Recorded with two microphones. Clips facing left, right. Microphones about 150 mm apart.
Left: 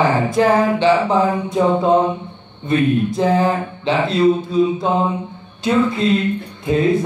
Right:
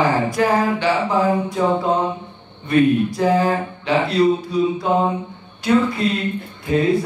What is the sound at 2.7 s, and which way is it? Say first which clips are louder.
Speech: right 1 dB; 25° left (ahead or behind).